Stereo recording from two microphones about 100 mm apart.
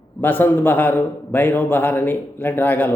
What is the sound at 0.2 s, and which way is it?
Speech, 20° left (ahead or behind).